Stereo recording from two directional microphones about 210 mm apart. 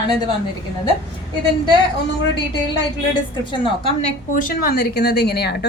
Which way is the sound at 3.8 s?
30° left (ahead or behind).